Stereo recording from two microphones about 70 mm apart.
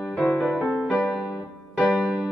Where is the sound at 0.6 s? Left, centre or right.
Left.